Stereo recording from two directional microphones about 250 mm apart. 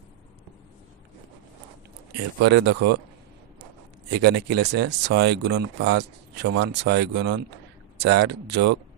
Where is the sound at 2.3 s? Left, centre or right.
Right.